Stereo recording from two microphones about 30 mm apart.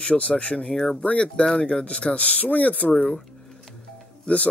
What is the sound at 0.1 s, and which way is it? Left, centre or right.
Speech, left.